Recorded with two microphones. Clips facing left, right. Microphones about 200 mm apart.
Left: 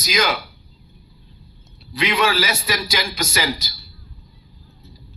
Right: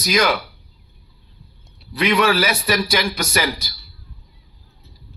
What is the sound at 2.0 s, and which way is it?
A man's voice, 60° right (ahead or behind).